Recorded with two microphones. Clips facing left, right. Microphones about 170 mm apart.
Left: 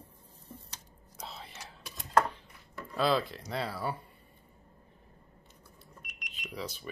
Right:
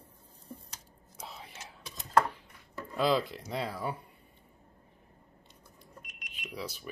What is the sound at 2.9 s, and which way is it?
Speech, 15° right (ahead or behind).